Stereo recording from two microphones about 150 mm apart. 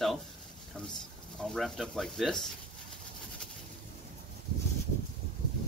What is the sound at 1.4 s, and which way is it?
Speech, centre (ahead or behind).